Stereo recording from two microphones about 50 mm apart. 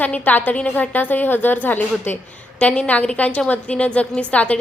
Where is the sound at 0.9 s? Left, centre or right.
Left.